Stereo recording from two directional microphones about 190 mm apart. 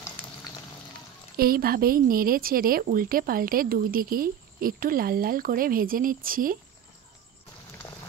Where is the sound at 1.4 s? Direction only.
50° right (ahead or behind).